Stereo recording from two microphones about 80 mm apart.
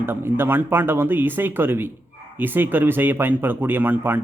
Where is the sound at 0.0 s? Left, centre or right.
Right.